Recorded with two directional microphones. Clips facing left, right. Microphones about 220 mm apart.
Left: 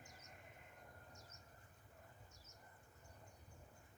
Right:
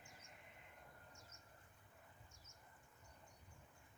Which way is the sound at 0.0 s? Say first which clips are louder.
Left 2 dB; 40° left (ahead or behind).